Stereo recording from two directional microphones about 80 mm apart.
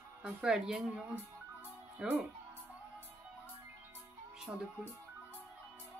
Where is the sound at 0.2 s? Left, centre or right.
Centre.